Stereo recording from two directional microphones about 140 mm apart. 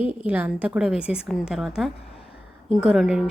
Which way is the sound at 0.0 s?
45° left (ahead or behind).